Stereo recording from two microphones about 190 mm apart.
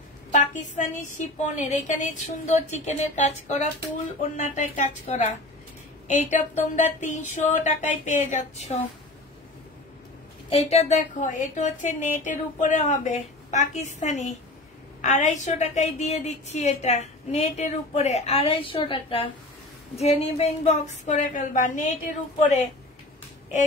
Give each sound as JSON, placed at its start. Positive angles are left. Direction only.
{"t": 0.3, "sound": "a woman's voice", "side_deg": 40}
{"t": 10.5, "sound": "a woman's voice", "side_deg": 35}